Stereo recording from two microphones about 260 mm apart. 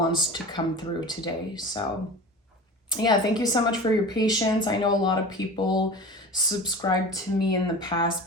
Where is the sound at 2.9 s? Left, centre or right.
Centre.